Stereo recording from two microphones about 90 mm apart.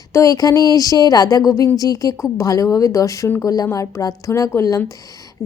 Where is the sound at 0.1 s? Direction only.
40° left (ahead or behind).